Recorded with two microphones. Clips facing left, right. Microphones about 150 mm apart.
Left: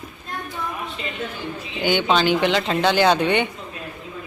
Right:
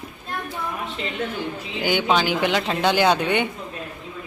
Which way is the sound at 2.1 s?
10° right (ahead or behind).